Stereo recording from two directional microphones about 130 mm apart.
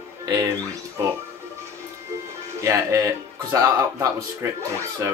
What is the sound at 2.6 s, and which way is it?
Music, 25° right (ahead or behind).